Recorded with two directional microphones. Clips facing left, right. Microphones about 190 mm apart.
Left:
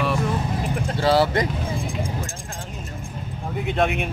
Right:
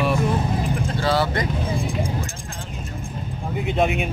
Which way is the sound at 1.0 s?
30° left (ahead or behind).